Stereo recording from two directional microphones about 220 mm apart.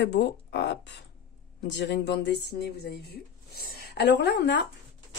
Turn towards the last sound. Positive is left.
turn(degrees=50)  # may be behind; listen again after turning